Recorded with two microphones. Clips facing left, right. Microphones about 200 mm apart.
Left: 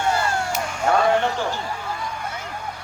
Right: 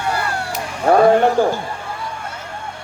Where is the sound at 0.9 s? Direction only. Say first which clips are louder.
Right 7 dB; 45° right (ahead or behind).